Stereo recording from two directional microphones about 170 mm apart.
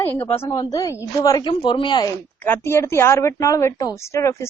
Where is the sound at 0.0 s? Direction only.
10° left (ahead or behind).